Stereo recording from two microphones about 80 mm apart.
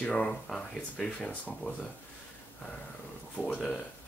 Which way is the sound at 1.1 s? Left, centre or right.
Centre.